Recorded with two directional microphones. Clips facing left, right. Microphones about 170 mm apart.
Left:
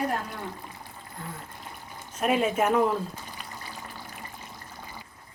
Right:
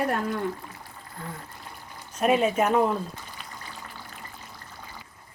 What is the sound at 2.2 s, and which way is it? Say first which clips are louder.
Speech: right 2 dB; 5° left (ahead or behind).